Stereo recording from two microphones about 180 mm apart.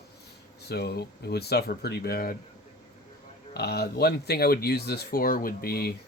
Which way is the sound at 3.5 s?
65° left (ahead or behind).